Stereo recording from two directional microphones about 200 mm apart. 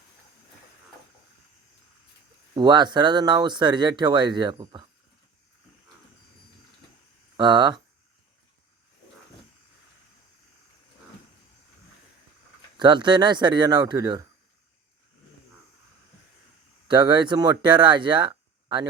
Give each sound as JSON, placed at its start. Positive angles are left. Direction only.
{"t": 2.6, "sound": "speech", "side_deg": -20}
{"t": 7.3, "sound": "speech", "side_deg": -20}
{"t": 12.7, "sound": "speech", "side_deg": -25}
{"t": 16.9, "sound": "speech", "side_deg": -20}